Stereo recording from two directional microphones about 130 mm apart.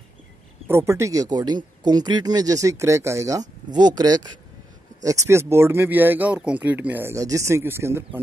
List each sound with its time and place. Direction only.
0.7 s speech: 20° right (ahead or behind)